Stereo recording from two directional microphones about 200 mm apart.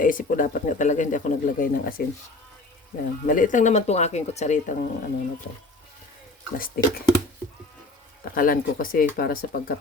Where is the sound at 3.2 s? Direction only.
40° left (ahead or behind).